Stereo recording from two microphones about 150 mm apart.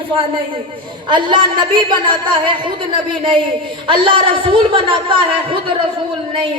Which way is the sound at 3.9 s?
35° right (ahead or behind).